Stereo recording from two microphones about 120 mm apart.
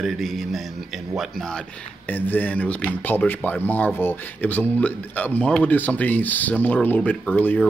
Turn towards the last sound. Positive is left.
turn(degrees=15)  # may be behind; listen again after turning